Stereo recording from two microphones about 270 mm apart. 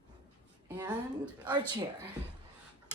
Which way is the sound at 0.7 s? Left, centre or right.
Centre.